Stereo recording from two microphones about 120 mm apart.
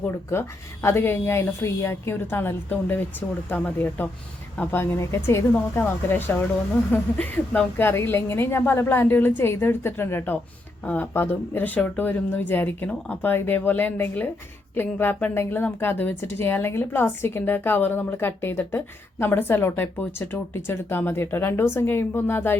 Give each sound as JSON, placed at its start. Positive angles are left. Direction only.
{"t": 0.0, "sound": "a woman's voice", "side_deg": 20}